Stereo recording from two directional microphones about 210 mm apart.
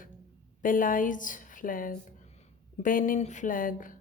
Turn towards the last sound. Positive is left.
turn(degrees=40)  # may be behind; listen again after turning